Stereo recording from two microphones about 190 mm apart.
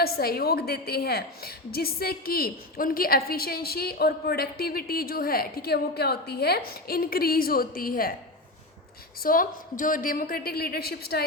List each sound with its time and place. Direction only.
0.0 s a woman's voice: 55° left (ahead or behind)
9.2 s a woman's voice: 45° left (ahead or behind)